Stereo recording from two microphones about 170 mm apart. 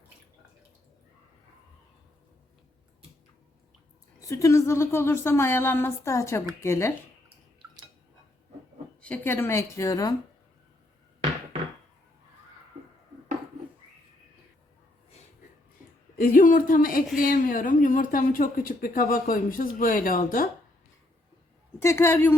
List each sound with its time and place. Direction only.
4.2 s a woman's voice: 20° left (ahead or behind)
9.0 s a woman's voice: 10° left (ahead or behind)
16.1 s a woman's voice: 55° left (ahead or behind)
21.8 s a woman's voice: 15° left (ahead or behind)